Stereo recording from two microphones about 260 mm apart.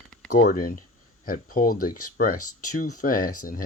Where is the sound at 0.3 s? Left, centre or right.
Left.